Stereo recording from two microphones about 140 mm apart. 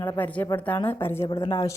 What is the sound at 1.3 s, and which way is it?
Speech, 35° left (ahead or behind).